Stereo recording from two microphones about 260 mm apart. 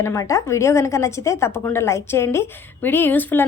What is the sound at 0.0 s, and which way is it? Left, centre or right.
A woman's voice, centre.